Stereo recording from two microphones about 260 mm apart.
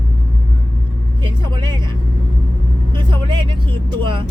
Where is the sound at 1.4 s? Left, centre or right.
Centre.